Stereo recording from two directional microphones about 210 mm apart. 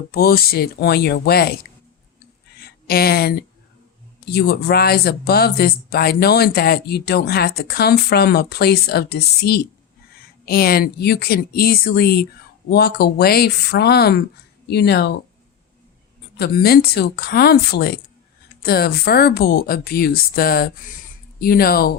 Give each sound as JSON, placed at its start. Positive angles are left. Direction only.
{"t": 0.1, "sound": "speech", "side_deg": 45}
{"t": 2.6, "sound": "a sound", "side_deg": 45}
{"t": 4.3, "sound": "speech", "side_deg": 50}
{"t": 16.4, "sound": "speech", "side_deg": 45}